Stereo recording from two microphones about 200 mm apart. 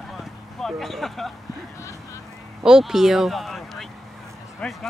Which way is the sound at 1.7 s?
15° left (ahead or behind).